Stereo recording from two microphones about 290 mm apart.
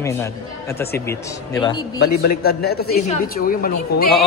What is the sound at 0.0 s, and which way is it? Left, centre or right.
Speech, centre.